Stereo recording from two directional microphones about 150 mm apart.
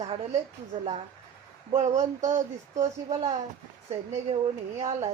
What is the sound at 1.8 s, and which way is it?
Speech, 50° right (ahead or behind).